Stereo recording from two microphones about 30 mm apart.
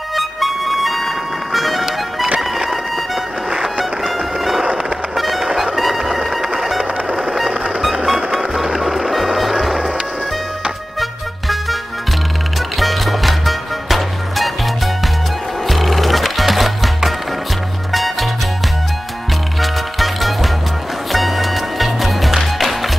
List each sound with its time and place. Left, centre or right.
0.1 s music: centre
5.5 s music: centre
5.8 s music: centre
6.8 s music: right
7.9 s music: centre
11.0 s music: centre
15.6 s music: centre
19.6 s music: centre